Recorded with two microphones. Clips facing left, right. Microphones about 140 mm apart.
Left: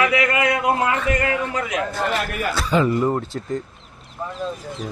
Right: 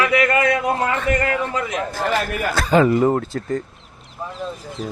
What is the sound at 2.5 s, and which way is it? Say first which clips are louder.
Speech: right 4 dB; 55° right (ahead or behind).